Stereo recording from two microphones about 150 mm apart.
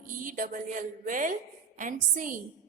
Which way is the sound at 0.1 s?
60° right (ahead or behind).